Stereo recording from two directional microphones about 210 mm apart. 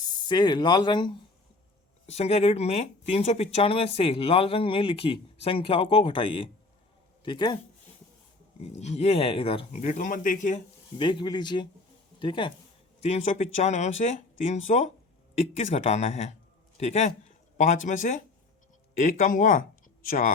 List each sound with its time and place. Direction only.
0.0 s speech: 20° left (ahead or behind)
8.6 s speech: 30° left (ahead or behind)
10.9 s speech: 20° left (ahead or behind)
16.7 s a sound: 30° left (ahead or behind)
17.8 s speech: 35° left (ahead or behind)